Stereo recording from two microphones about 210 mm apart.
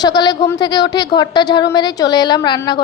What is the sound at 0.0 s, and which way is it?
A woman's voice, 20° left (ahead or behind).